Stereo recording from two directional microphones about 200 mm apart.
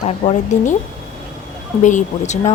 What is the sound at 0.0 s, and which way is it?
Speech, 35° left (ahead or behind).